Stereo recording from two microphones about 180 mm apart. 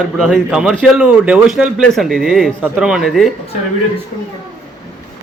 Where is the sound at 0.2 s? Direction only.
Centre (ahead or behind).